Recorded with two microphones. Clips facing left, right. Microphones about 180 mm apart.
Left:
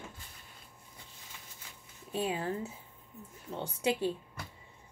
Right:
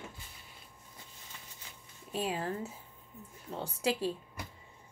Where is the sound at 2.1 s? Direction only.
25° left (ahead or behind).